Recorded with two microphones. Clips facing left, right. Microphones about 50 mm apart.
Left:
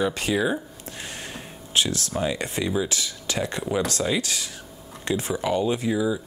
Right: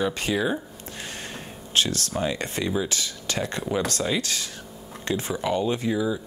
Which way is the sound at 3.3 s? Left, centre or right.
Centre.